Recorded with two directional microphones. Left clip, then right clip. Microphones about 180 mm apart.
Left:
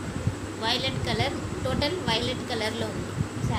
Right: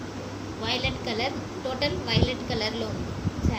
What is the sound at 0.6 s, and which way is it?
A woman's voice, 15° right (ahead or behind).